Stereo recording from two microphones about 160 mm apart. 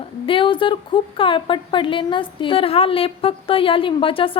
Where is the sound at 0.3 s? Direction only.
35° left (ahead or behind).